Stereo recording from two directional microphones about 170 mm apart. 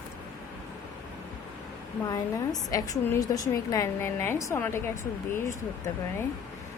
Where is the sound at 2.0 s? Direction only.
20° left (ahead or behind).